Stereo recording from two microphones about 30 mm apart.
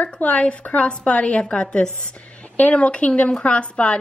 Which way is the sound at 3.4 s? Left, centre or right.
Left.